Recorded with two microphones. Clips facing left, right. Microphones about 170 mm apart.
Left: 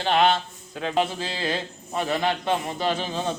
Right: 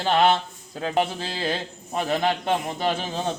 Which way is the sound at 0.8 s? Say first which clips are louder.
Even; 50° right (ahead or behind).